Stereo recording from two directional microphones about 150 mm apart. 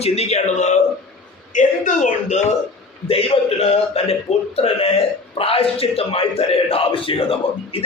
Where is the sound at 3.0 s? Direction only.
40° left (ahead or behind).